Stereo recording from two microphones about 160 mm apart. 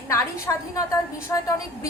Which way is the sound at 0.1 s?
20° left (ahead or behind).